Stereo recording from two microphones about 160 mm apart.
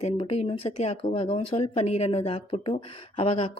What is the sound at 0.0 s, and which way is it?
Speech, 40° left (ahead or behind).